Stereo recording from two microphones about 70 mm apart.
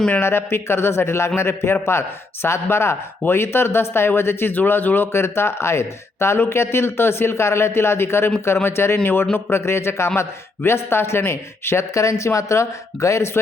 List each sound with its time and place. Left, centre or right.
0.2 s speech: left